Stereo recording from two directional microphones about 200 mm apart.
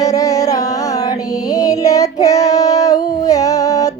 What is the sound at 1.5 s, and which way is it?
Child singing, 15° left (ahead or behind).